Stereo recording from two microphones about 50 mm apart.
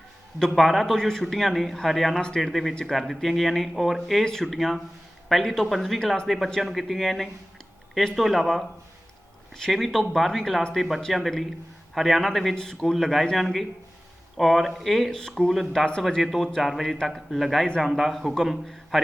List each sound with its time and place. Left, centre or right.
0.3 s speech: centre
16.2 s speech: centre